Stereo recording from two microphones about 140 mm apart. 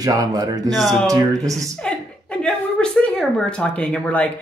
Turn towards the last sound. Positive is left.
turn(degrees=10)  # may be behind; listen again after turning